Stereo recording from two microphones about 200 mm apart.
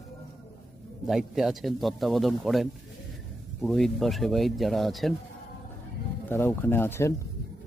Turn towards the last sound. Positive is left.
turn(degrees=10)  # may be behind; listen again after turning